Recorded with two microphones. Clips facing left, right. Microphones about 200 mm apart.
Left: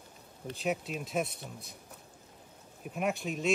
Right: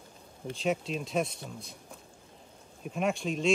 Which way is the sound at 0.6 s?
5° left (ahead or behind).